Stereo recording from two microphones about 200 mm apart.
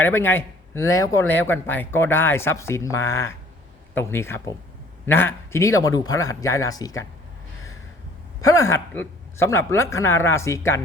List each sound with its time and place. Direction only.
0.0 s a man's voice: 10° left (ahead or behind)
8.4 s a man's voice: 15° left (ahead or behind)